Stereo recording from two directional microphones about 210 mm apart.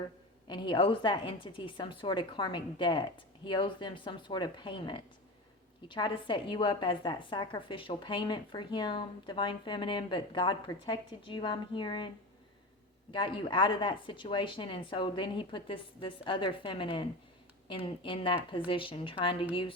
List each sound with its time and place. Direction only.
0.4 s a woman's voice: 20° left (ahead or behind)
13.1 s a woman's voice: 25° left (ahead or behind)